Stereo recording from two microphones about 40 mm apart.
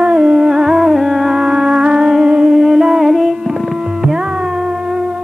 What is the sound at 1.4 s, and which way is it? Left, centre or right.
Music, right.